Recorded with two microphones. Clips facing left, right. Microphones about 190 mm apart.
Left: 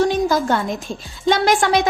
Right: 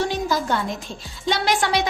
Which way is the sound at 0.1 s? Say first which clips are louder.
Left 5 dB; 50° left (ahead or behind).